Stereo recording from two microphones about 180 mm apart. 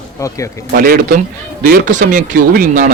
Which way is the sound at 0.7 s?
55° right (ahead or behind).